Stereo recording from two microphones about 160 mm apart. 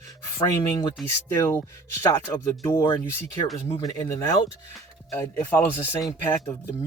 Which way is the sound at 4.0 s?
20° left (ahead or behind).